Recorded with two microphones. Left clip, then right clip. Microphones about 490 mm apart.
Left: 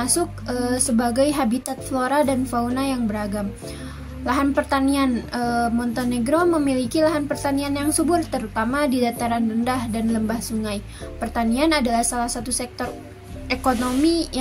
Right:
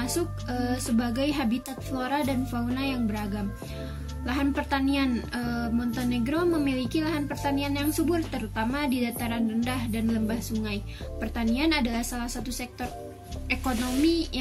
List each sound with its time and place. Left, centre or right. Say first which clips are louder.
0.0 s a woman's voice: left 6 dB; right
4.3 s a woman's voice: left 7 dB; right
14.0 s a woman's voice: left 4 dB; right